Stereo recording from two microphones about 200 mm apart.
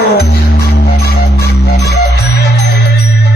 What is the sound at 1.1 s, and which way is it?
Music, 50° left (ahead or behind).